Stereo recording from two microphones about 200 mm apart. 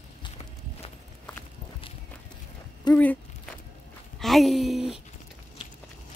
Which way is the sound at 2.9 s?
20° left (ahead or behind).